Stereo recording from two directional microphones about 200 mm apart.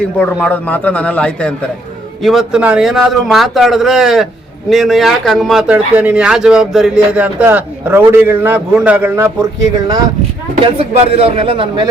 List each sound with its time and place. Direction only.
0.2 s a man's voice: 5° left (ahead or behind); by 10.0 s 20° right (ahead or behind)
10.8 s speech: 30° right (ahead or behind)